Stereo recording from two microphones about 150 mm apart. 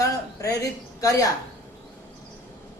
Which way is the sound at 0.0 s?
20° left (ahead or behind).